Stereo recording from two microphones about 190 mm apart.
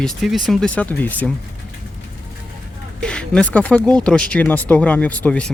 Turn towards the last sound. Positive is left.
turn(degrees=5)  # may be behind; listen again after turning